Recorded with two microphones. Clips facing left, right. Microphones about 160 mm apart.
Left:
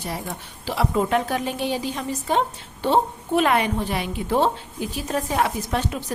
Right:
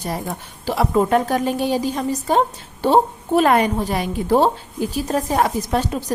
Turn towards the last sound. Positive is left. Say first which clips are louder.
# right 4 dB
turn(degrees=-35)  # may be behind; listen again after turning